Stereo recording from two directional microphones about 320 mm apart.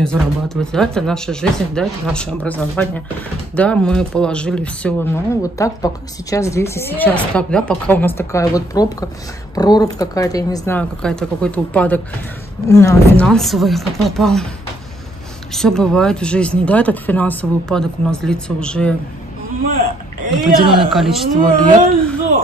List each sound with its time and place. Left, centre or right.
0.0 s speech: centre
15.5 s speech: centre
20.6 s a woman's voice: centre
20.9 s speech: centre